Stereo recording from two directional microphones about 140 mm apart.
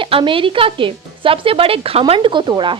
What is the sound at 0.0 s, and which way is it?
Speech, 40° right (ahead or behind).